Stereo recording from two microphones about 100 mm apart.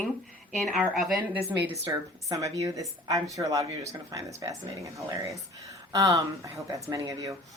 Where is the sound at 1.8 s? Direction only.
35° right (ahead or behind).